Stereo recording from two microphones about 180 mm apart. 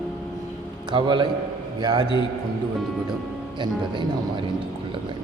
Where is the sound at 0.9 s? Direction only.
25° right (ahead or behind).